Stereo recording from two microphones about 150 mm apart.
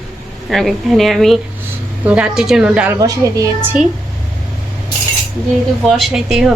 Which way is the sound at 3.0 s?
25° right (ahead or behind).